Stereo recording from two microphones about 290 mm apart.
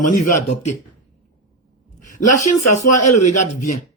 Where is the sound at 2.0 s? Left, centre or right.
Left.